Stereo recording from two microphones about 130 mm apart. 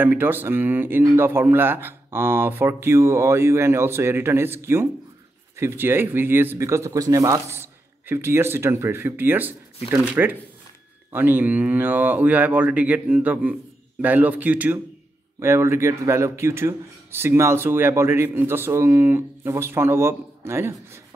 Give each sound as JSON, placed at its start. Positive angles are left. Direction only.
{"t": 0.0, "sound": "speech", "side_deg": -15}